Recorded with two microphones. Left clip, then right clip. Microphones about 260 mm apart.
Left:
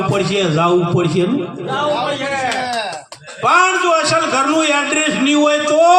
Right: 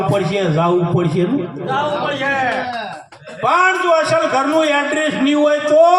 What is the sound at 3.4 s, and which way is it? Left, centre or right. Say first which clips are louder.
A man's voice: left 1 dB; left.